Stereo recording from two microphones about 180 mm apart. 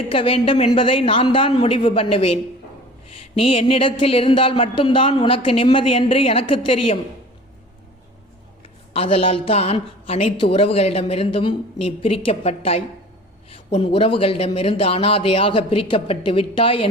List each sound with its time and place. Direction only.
0.1 s a man's voice: 30° left (ahead or behind)
8.9 s speech: 35° left (ahead or behind)